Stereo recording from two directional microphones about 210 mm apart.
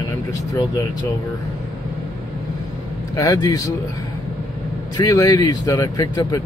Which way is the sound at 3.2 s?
20° left (ahead or behind).